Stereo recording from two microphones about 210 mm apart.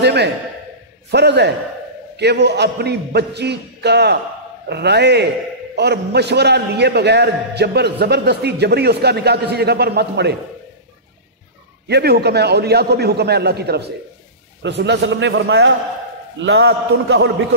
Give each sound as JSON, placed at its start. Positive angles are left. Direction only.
{"t": 0.0, "sound": "a man's voice", "side_deg": -55}
{"t": 11.9, "sound": "a man's voice", "side_deg": -50}